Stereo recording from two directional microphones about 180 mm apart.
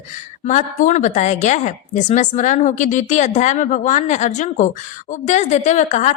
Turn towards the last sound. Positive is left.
turn(degrees=40)  # may be behind; listen again after turning